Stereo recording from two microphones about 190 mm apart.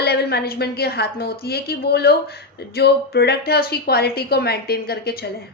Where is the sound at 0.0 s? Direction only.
60° left (ahead or behind).